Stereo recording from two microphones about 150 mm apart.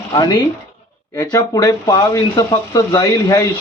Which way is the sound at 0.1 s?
25° left (ahead or behind).